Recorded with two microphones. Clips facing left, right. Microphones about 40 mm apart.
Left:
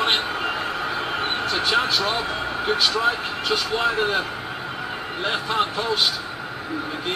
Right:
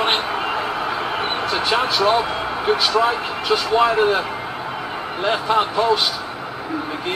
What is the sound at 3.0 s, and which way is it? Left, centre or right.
A man's voice, centre.